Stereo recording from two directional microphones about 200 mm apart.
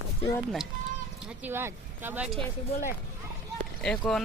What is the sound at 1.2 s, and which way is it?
Speech, 10° right (ahead or behind).